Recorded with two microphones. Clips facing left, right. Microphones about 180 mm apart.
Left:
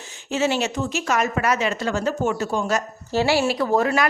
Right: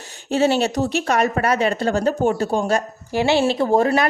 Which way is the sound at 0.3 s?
35° right (ahead or behind).